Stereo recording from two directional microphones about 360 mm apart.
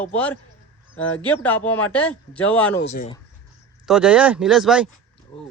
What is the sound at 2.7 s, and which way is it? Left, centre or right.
Speech, left.